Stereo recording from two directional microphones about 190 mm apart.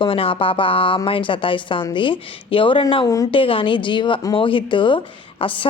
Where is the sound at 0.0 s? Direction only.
30° left (ahead or behind).